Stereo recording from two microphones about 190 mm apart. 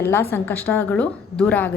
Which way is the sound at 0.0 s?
10° left (ahead or behind).